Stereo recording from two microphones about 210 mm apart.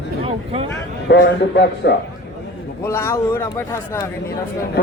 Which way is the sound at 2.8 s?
10° left (ahead or behind).